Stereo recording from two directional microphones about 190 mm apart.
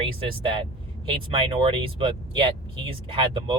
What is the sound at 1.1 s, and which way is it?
Speech, 30° right (ahead or behind).